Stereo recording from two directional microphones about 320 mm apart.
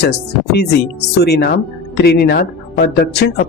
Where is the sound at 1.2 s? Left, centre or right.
Left.